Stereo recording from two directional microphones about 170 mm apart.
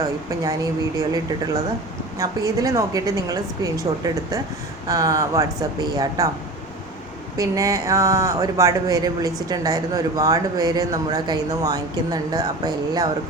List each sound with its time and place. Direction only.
0.0 s speech: 20° right (ahead or behind)
7.3 s speech: 20° right (ahead or behind)